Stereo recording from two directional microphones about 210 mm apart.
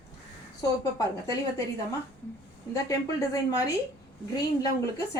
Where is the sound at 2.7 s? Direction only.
15° left (ahead or behind).